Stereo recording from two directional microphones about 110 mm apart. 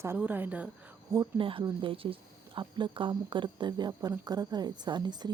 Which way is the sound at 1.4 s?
50° right (ahead or behind).